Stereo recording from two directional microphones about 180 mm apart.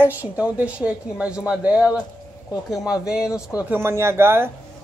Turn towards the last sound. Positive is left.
turn(degrees=-15)  # may be behind; listen again after turning